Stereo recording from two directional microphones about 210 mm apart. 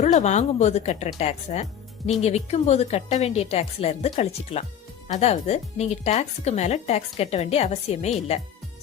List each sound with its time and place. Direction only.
0.0 s speech: 35° left (ahead or behind)